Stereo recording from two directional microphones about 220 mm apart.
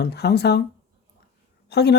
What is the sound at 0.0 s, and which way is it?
Speech, 50° left (ahead or behind).